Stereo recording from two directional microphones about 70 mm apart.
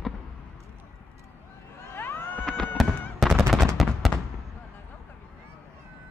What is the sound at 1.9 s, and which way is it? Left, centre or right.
Cat, left.